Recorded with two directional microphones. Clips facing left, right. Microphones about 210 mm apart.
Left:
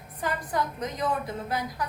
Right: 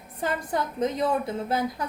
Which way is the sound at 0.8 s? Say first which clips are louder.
Right 7 dB; 25° right (ahead or behind).